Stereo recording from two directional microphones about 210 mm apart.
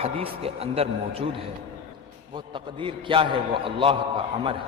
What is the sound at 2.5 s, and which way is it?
A man's voice, 25° right (ahead or behind).